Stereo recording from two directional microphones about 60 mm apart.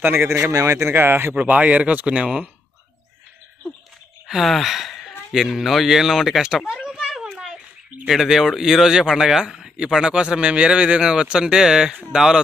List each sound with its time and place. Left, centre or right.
0.0 s speech: right
0.5 s speech: right
0.9 s speech: right
1.3 s speech: right
4.3 s speech: centre